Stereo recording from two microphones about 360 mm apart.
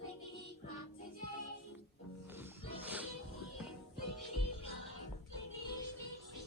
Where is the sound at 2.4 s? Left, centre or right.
Centre.